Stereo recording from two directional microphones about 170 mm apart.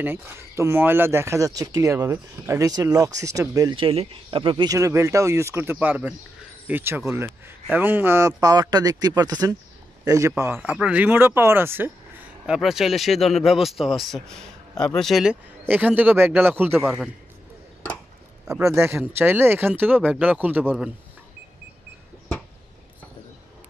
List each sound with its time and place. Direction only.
0.0 s speech: 10° right (ahead or behind)
18.6 s speech: 15° right (ahead or behind)